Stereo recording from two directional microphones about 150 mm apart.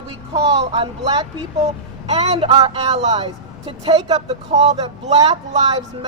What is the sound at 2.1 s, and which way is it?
Speech, 45° right (ahead or behind).